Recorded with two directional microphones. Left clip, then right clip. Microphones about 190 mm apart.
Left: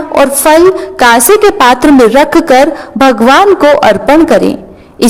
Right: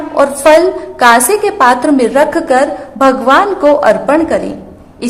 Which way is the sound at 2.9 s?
40° left (ahead or behind).